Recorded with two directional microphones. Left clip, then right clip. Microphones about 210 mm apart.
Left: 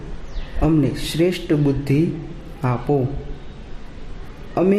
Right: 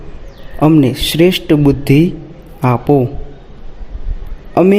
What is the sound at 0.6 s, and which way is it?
A man's voice, 35° right (ahead or behind).